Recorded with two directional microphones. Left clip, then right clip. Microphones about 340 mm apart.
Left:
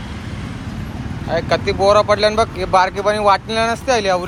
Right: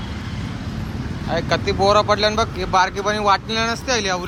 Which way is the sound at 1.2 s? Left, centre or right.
Centre.